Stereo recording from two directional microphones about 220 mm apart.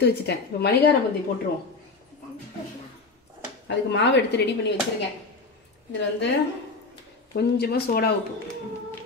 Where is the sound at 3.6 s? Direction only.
55° left (ahead or behind).